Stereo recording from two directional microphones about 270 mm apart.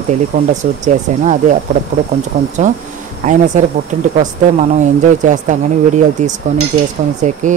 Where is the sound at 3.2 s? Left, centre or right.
Right.